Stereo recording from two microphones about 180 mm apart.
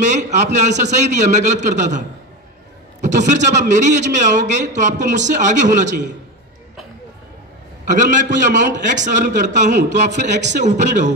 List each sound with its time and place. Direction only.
0.0 s a man's voice: 40° right (ahead or behind)
7.8 s a man's voice: 45° right (ahead or behind)